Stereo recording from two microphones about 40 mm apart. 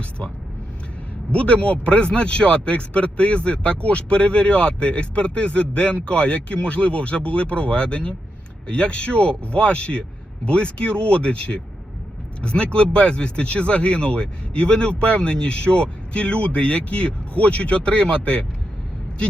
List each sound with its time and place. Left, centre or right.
1.3 s speech: left